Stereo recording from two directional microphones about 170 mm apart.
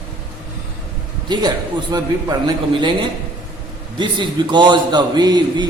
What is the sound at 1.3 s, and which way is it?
A man's voice, 25° right (ahead or behind).